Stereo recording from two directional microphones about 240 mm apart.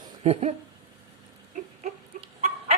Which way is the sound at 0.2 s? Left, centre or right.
Right.